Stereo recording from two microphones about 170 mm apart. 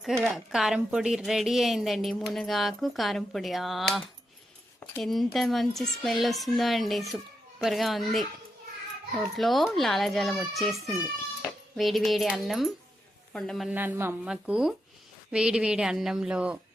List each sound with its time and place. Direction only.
0.0 s a woman's voice: centre (ahead or behind)
9.3 s a woman's voice: centre (ahead or behind)
13.7 s a woman's voice: 15° right (ahead or behind)